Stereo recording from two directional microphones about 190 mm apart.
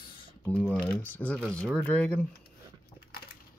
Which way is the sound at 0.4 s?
10° left (ahead or behind).